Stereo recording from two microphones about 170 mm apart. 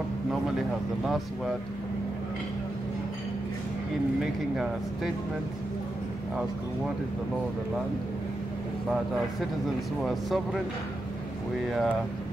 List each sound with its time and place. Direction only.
1.0 s speech: centre (ahead or behind)
4.2 s speech: centre (ahead or behind)
10.0 s speech: centre (ahead or behind)
11.6 s speech: centre (ahead or behind)